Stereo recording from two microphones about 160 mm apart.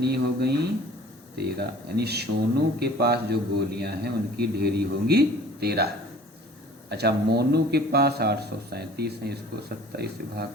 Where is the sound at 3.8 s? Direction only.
80° right.